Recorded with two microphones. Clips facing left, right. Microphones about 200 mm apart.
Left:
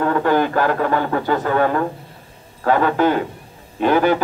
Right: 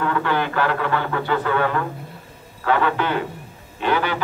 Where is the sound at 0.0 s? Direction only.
40° left (ahead or behind).